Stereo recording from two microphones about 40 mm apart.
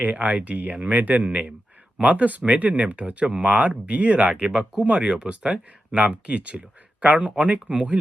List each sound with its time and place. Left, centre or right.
0.0 s speech: right
3.3 s speech: right